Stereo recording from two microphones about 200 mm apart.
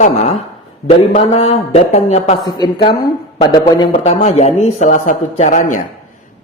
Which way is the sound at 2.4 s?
20° left (ahead or behind).